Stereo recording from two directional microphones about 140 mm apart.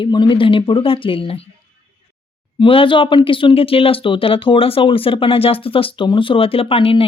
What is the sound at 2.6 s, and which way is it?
Speech, 40° left (ahead or behind).